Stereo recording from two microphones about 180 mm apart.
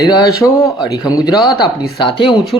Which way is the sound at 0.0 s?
20° left (ahead or behind).